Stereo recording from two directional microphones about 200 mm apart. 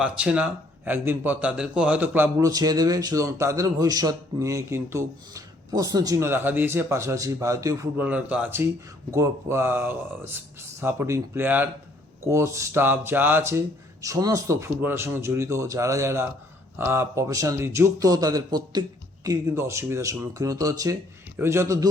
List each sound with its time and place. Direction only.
0.0 s a man's voice: 5° right (ahead or behind)